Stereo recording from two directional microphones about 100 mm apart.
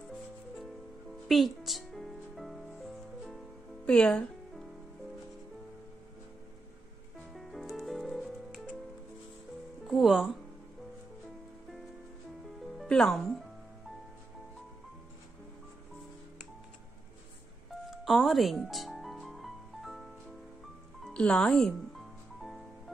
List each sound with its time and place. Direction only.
1.3 s music: centre (ahead or behind)
3.8 s music: 10° left (ahead or behind)
7.3 s music: centre (ahead or behind)
9.8 s speech: centre (ahead or behind)
12.8 s music: 5° left (ahead or behind)
17.8 s music: centre (ahead or behind)
21.0 s music: 10° left (ahead or behind)